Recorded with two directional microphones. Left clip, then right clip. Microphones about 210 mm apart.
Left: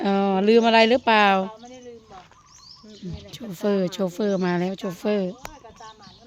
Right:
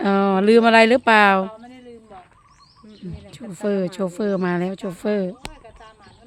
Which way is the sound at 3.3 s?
Centre (ahead or behind).